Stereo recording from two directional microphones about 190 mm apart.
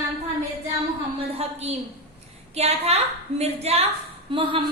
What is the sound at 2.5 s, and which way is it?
A woman's voice, 35° right (ahead or behind).